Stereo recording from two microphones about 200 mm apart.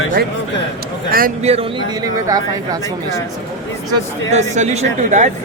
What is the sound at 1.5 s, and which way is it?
Speech, 30° right (ahead or behind).